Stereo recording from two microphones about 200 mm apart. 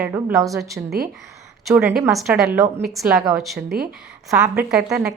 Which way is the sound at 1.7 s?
15° right (ahead or behind).